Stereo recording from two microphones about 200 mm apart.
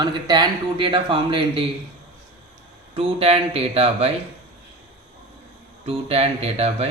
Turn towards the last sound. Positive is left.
turn(degrees=-30)  # may be behind; listen again after turning